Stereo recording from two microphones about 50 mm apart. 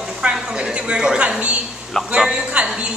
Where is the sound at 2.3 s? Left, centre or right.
Right.